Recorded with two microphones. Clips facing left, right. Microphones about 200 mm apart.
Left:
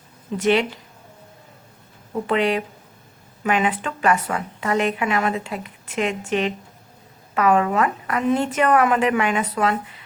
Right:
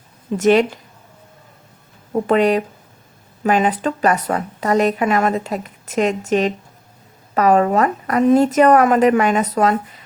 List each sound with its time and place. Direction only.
0.3 s speech: 45° right (ahead or behind)
2.1 s a woman's voice: 45° right (ahead or behind)